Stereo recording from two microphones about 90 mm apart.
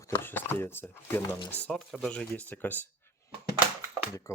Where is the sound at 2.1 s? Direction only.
15° left (ahead or behind).